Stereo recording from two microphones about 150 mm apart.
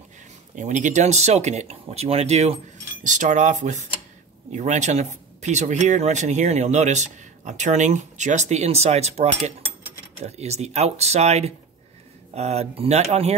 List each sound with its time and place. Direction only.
0.6 s speech: 55° right (ahead or behind)